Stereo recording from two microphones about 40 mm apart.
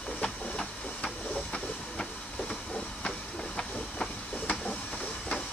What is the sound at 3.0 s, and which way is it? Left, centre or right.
Train, left.